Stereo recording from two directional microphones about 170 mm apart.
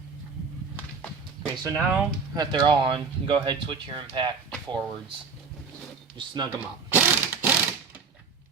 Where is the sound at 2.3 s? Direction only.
25° right (ahead or behind).